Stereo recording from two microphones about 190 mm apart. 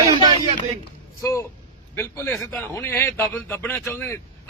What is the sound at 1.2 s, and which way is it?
A man's voice, 15° left (ahead or behind).